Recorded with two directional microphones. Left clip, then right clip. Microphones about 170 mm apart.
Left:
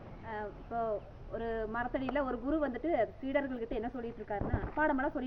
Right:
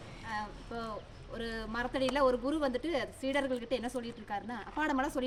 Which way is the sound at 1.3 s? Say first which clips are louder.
Left 2 dB; 35° right (ahead or behind).